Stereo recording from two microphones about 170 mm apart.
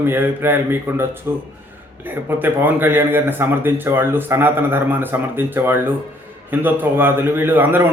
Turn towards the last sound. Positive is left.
turn(degrees=-10)  # may be behind; listen again after turning